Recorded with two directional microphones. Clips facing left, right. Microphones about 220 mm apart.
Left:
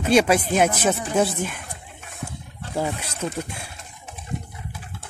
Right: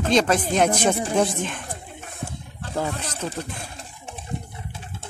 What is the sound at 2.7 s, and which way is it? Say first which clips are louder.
Speech: left 1 dB; 10° left (ahead or behind).